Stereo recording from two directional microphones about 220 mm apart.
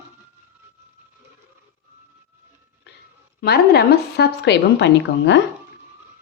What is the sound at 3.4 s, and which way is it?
Speech, 45° left (ahead or behind).